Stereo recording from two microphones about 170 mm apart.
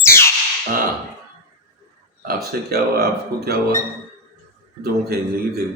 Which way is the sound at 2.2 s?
65° right (ahead or behind).